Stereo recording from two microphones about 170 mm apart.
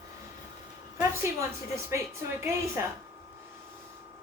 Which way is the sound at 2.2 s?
15° right (ahead or behind).